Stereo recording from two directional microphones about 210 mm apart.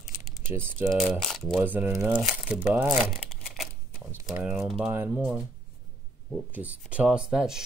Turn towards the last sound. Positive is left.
turn(degrees=-5)  # may be behind; listen again after turning